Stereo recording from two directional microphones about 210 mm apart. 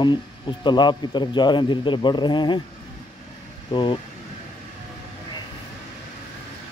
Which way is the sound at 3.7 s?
25° left (ahead or behind).